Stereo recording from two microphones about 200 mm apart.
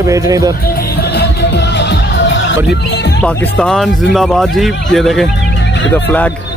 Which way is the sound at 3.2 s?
5° left (ahead or behind).